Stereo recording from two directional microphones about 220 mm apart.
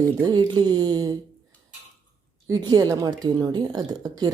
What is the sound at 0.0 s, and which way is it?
A woman's voice, 15° right (ahead or behind).